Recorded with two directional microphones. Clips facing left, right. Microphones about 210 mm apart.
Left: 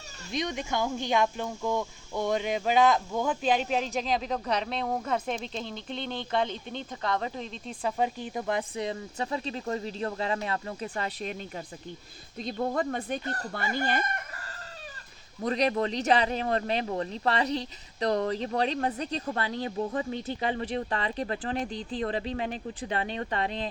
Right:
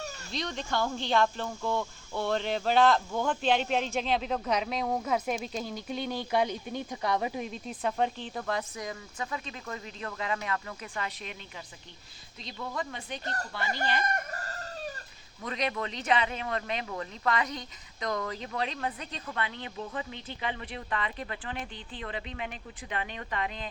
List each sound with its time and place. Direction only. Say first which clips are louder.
0.3 s speech: left 4 dB; 15° left (ahead or behind)
8.3 s speech: left 3 dB; 20° left (ahead or behind)
8.7 s speech: left 6 dB; 30° left (ahead or behind); by 14.0 s 45° left (ahead or behind)
14.1 s chicken: right 4 dB; 45° right (ahead or behind)
15.4 s speech: left 7 dB; 35° left (ahead or behind)